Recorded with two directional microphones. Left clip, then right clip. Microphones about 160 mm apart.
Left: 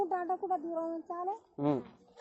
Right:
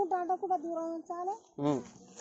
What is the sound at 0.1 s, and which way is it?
Speech, 35° right (ahead or behind).